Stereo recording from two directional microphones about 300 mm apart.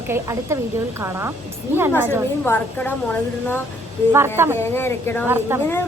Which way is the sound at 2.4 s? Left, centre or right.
Centre.